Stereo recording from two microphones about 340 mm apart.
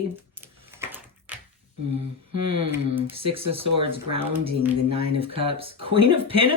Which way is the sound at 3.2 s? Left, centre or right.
Centre.